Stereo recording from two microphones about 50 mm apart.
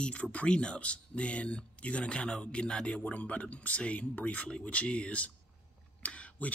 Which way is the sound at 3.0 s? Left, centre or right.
Left.